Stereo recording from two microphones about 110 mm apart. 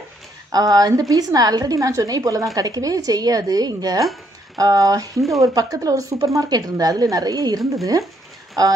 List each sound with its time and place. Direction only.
0.5 s a woman's voice: 35° right (ahead or behind)